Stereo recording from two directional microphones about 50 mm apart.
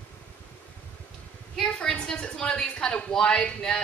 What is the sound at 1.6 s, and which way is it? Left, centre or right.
A woman's voice, centre.